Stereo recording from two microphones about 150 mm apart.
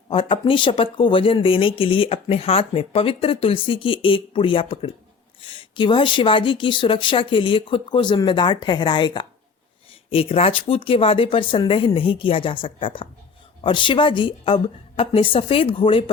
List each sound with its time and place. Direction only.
0.1 s speech: 35° left (ahead or behind)